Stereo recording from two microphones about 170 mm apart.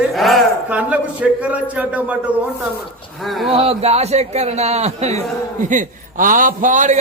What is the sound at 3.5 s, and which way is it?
A man's voice, 35° right (ahead or behind).